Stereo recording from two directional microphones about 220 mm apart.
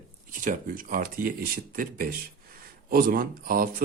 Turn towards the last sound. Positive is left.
turn(degrees=-40)  # may be behind; listen again after turning